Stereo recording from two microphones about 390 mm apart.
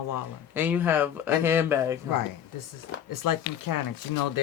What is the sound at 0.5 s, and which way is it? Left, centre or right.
Speech, centre.